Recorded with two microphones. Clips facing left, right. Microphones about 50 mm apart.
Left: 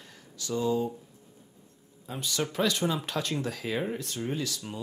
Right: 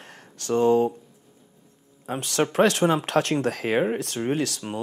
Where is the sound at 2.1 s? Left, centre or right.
Right.